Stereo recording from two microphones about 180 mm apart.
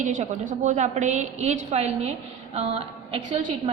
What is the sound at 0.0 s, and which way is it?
A woman's voice, 45° right (ahead or behind).